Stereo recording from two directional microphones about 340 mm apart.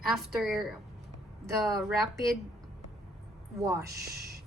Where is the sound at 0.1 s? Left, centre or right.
Centre.